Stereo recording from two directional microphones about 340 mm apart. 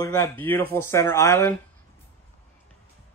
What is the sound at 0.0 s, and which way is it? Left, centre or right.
Speech, centre.